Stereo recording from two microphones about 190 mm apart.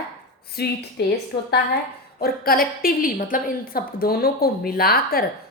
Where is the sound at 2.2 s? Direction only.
50° left (ahead or behind).